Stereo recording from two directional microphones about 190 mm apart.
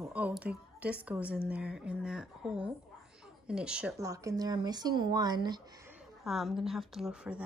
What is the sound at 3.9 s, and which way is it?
Speech, 15° right (ahead or behind).